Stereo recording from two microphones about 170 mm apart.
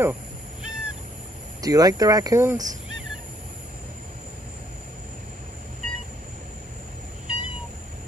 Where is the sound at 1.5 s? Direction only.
20° right (ahead or behind).